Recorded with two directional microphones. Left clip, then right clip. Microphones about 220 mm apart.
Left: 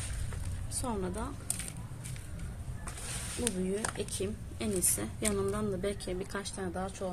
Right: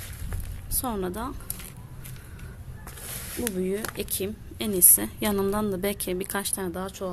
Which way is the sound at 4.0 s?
45° right (ahead or behind).